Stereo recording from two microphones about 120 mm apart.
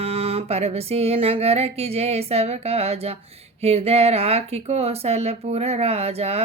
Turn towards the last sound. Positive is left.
turn(degrees=-60)  # may be behind; listen again after turning